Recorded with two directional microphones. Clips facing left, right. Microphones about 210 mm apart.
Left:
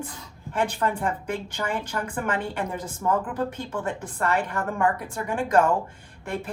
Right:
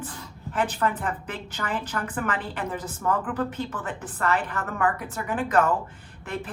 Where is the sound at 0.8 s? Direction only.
25° left (ahead or behind).